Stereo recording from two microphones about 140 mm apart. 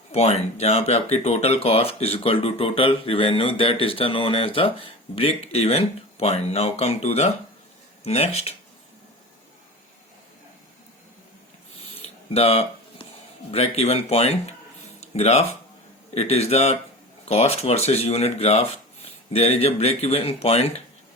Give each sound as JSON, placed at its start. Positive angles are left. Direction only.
{"t": 0.1, "sound": "speech", "side_deg": 50}
{"t": 11.9, "sound": "a sound", "side_deg": 45}
{"t": 13.5, "sound": "speech", "side_deg": 45}